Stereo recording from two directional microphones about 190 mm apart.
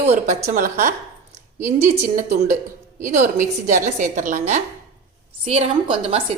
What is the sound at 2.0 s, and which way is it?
A woman's voice, 45° right (ahead or behind).